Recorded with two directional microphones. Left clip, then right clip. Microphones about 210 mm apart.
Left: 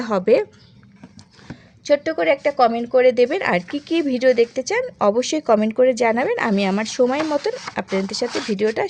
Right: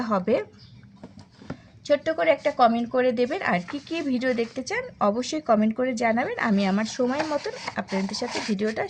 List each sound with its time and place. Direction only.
0.0 s speech: 45° left (ahead or behind)
1.8 s speech: 35° left (ahead or behind)